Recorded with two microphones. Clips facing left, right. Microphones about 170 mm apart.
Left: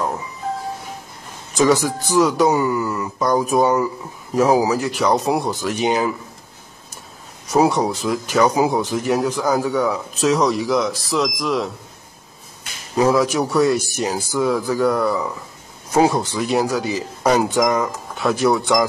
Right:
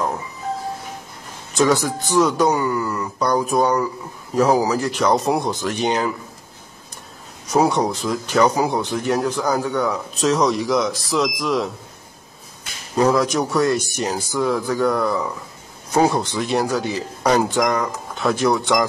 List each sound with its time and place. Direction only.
1.6 s speech: centre (ahead or behind)
2.5 s speech: 15° left (ahead or behind)
2.8 s speech: centre (ahead or behind)
7.4 s speech: centre (ahead or behind)
12.9 s speech: centre (ahead or behind)